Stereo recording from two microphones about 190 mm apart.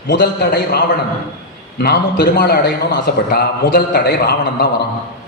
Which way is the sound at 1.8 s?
55° left (ahead or behind).